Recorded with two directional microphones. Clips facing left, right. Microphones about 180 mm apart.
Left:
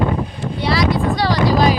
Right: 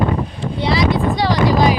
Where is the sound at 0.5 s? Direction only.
20° right (ahead or behind).